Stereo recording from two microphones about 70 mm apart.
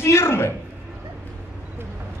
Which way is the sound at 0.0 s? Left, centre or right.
Left.